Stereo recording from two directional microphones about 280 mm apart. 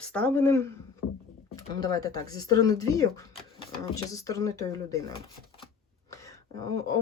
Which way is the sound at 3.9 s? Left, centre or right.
Centre.